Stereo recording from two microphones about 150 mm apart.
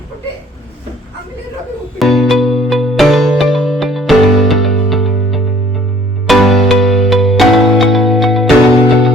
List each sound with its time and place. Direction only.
2.0 s music: centre (ahead or behind)